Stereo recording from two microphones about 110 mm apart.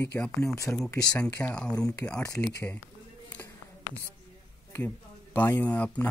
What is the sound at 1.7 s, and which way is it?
Speech, 35° left (ahead or behind).